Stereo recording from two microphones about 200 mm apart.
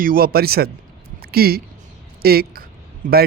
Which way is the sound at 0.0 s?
45° right (ahead or behind).